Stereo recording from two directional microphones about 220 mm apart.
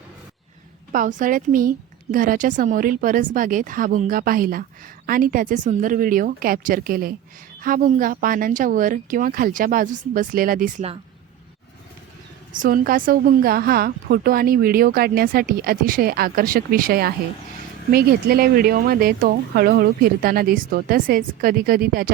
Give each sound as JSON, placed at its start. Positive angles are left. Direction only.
{"t": 0.9, "sound": "speech", "side_deg": -35}
{"t": 12.5, "sound": "a woman's voice", "side_deg": -40}